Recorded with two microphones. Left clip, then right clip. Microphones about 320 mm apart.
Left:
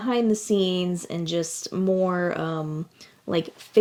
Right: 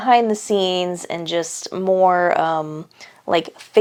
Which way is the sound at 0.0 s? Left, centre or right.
Right.